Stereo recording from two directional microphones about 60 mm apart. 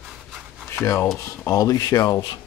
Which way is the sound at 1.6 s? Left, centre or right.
Left.